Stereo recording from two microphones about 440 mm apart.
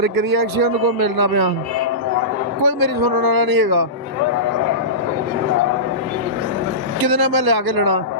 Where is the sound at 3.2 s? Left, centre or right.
Right.